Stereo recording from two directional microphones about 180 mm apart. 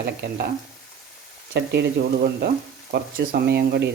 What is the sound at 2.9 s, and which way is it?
Speech, 55° right (ahead or behind).